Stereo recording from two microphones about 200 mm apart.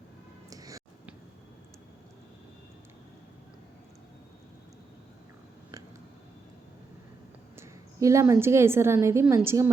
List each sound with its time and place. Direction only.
0.5 s music: 15° right (ahead or behind)
7.5 s a woman's voice: 15° right (ahead or behind)